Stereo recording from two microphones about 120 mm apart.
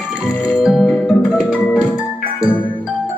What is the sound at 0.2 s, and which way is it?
Music, centre (ahead or behind).